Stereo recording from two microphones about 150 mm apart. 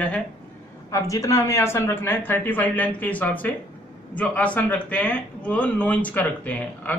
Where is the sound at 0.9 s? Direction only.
20° left (ahead or behind).